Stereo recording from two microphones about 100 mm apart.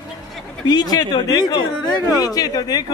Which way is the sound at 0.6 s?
45° left (ahead or behind).